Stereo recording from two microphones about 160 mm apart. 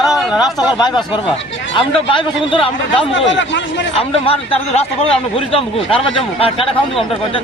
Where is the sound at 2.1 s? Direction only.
30° left (ahead or behind).